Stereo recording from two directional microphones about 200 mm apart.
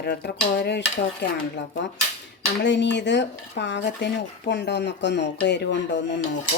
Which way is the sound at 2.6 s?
60° left (ahead or behind).